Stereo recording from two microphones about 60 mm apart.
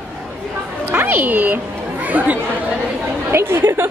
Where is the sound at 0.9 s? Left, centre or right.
Right.